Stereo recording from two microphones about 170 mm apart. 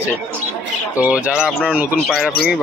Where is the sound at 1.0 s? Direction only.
10° right (ahead or behind).